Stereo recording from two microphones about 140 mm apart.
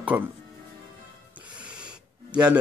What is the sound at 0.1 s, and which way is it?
Speech, 15° right (ahead or behind).